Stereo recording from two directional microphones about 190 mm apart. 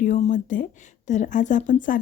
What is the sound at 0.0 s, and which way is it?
A woman's voice, 40° left (ahead or behind).